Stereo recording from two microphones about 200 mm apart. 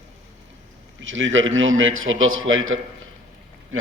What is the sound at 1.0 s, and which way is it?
A man's voice, 75° right (ahead or behind).